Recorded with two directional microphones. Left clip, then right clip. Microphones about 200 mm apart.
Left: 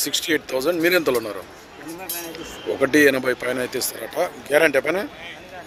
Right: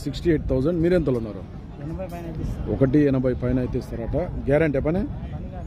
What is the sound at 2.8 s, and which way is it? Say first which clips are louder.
Speech: left 4 dB; 5° left (ahead or behind).